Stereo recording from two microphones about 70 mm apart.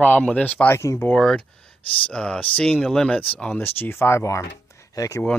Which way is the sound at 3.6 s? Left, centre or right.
Left.